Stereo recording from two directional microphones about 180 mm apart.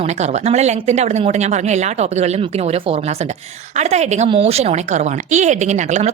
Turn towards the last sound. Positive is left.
turn(degrees=-40)  # may be behind; listen again after turning